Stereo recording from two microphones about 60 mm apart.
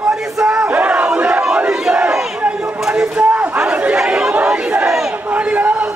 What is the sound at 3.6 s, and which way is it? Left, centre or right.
Chatter, right.